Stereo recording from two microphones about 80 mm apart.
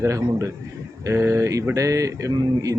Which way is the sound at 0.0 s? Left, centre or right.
Right.